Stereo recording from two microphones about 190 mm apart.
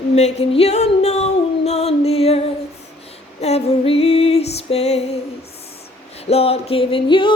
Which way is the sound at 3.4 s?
30° left (ahead or behind).